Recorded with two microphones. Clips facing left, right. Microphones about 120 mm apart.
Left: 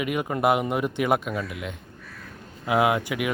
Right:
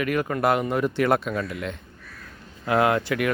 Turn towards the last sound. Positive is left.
turn(degrees=15)  # may be behind; listen again after turning